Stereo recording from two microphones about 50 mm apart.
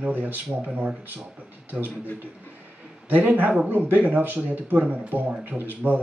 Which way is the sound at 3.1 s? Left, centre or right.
Right.